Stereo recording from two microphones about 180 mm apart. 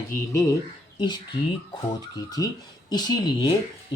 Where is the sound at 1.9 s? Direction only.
20° left (ahead or behind).